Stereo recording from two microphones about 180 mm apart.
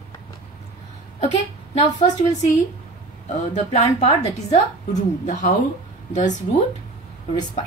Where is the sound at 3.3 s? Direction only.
40° left (ahead or behind).